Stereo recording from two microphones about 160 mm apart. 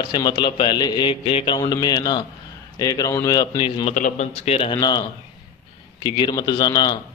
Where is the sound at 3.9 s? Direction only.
50° left (ahead or behind).